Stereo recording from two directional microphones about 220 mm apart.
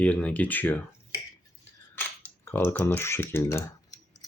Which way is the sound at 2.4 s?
10° left (ahead or behind).